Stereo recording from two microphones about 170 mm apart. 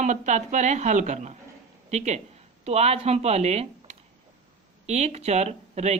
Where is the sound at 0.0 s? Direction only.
45° right (ahead or behind).